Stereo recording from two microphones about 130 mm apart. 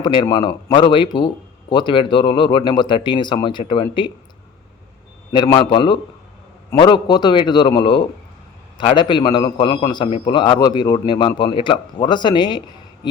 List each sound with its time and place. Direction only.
0.0 s a man's voice: 35° left (ahead or behind)
5.3 s a man's voice: 35° left (ahead or behind)